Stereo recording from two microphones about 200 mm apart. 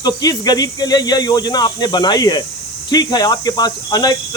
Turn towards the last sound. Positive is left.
turn(degrees=20)  # may be behind; listen again after turning